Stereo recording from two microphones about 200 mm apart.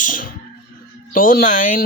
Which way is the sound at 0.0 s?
45° left (ahead or behind).